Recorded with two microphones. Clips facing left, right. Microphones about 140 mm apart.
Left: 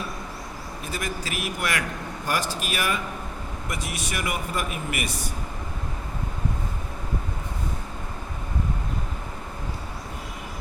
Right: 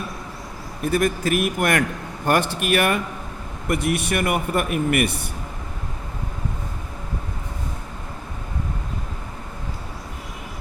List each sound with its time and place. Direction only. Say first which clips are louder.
0.8 s a man's voice: right 12 dB; 55° right (ahead or behind)